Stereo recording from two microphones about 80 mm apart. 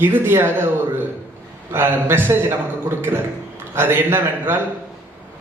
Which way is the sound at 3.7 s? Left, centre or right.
Right.